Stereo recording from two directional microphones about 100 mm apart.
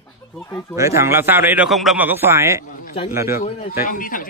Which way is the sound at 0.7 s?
30° right (ahead or behind).